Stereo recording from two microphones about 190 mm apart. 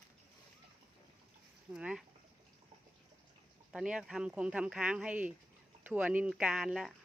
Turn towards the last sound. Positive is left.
turn(degrees=0)  # may be behind; listen again after turning